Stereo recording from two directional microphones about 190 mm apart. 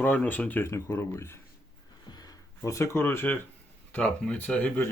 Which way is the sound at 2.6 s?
15° left (ahead or behind).